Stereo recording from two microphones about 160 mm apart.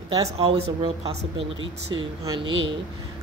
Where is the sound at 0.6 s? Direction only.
35° right (ahead or behind).